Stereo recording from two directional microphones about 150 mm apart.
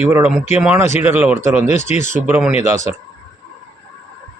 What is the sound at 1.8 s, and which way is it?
Speech, 50° left (ahead or behind).